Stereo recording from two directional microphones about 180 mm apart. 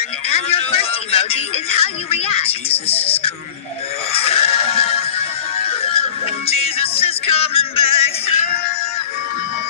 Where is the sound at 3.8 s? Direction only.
35° left (ahead or behind).